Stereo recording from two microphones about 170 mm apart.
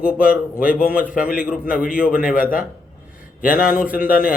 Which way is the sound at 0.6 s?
55° left (ahead or behind).